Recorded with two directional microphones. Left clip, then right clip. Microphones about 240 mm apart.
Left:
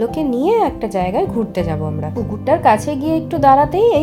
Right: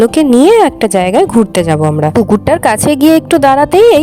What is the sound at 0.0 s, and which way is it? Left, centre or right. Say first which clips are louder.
A woman's voice: right 11 dB; right.